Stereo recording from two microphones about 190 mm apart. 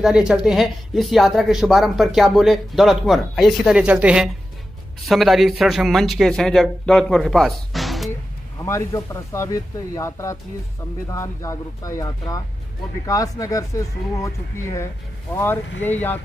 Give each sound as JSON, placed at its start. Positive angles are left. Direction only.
{"t": 0.0, "sound": "speech", "side_deg": -5}
{"t": 8.6, "sound": "speech", "side_deg": 15}